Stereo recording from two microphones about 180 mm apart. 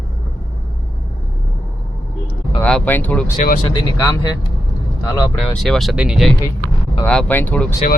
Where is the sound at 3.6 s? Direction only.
20° left (ahead or behind).